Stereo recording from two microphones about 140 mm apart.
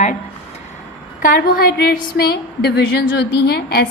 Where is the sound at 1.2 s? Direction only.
90° left.